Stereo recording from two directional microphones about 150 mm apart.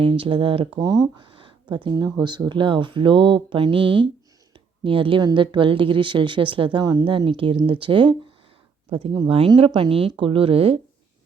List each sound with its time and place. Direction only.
0.0 s speech: 35° right (ahead or behind)